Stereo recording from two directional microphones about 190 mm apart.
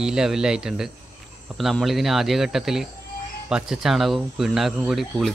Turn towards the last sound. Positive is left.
turn(degrees=0)  # may be behind; listen again after turning